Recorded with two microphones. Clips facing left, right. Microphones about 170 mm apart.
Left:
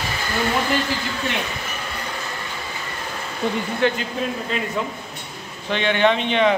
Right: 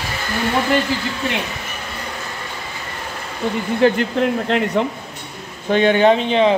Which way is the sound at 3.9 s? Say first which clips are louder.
Right 7 dB; 70° right (ahead or behind).